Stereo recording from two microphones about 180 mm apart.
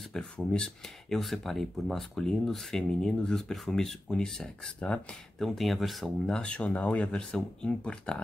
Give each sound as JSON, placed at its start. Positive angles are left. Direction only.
{"t": 0.1, "sound": "speech", "side_deg": 5}